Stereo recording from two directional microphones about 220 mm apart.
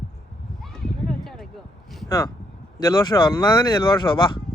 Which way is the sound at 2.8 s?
20° left (ahead or behind).